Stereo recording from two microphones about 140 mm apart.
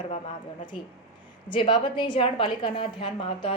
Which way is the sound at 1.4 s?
35° left (ahead or behind).